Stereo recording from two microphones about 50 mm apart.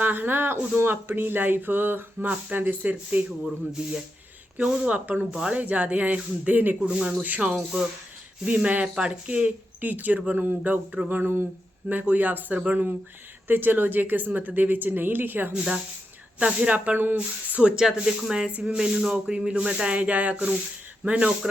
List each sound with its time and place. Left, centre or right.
0.0 s speech: right
0.8 s a sound: right
2.3 s a woman's voice: right
4.6 s speech: right
7.0 s a woman's voice: centre; by 11.4 s right
11.9 s a woman's voice: right
13.5 s a woman's voice: right
16.4 s speech: right
17.2 s speech: right